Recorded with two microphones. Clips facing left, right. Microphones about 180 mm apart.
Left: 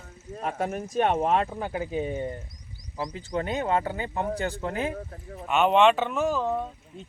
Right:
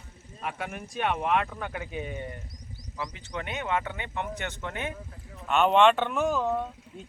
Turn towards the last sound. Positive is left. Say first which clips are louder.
# left 1 dB
turn(degrees=0)  # may be behind; listen again after turning